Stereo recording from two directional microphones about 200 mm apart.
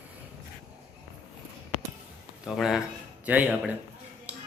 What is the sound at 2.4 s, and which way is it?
Speech, centre (ahead or behind).